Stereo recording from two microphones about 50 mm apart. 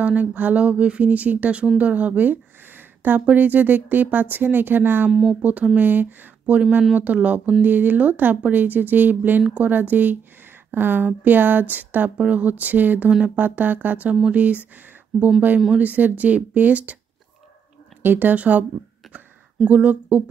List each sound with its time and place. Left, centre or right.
0.0 s a woman's voice: right
5.1 s speech: centre
5.4 s a woman's voice: right
6.4 s a woman's voice: right
15.1 s speech: centre
15.7 s a woman's voice: right
18.0 s speech: right
18.3 s speech: right
19.7 s a woman's voice: right